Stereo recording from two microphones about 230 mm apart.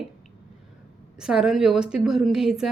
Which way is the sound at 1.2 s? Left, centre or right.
Centre.